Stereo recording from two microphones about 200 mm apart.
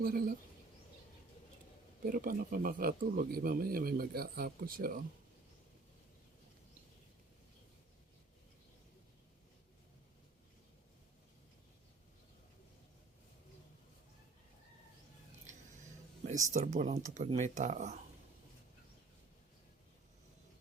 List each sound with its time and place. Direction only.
0.0 s speech: 45° right (ahead or behind)
2.0 s speech: 45° right (ahead or behind)
16.2 s speech: 40° right (ahead or behind)